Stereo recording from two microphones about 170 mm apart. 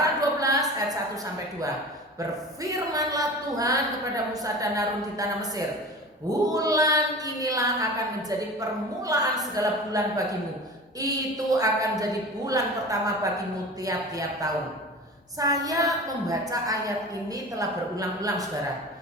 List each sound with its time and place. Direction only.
0.0 s a sound: 20° right (ahead or behind)
2.9 s a woman's voice: 20° right (ahead or behind)
9.0 s a woman's voice: 20° right (ahead or behind)